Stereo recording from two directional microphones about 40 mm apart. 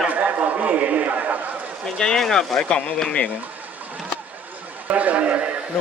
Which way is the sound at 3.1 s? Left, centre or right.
Left.